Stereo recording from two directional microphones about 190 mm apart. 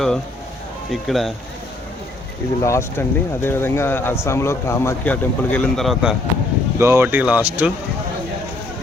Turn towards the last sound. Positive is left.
turn(degrees=-10)  # may be behind; listen again after turning